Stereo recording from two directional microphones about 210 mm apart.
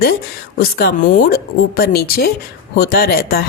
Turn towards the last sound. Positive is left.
turn(degrees=45)  # may be behind; listen again after turning